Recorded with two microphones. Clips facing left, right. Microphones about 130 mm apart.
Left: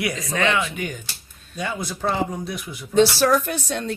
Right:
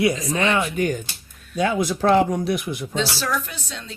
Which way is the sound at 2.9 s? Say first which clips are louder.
Left 9 dB; 55° left (ahead or behind).